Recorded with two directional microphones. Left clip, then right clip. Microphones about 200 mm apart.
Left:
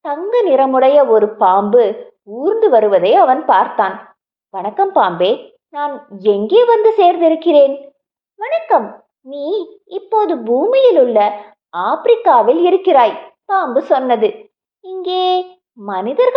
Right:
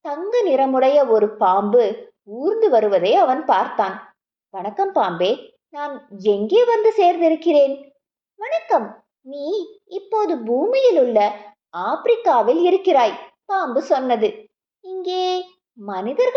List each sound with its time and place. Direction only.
0.0 s a woman's voice: 15° left (ahead or behind)